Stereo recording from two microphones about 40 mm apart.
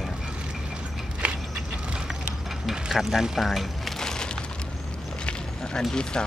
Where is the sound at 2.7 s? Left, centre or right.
Centre.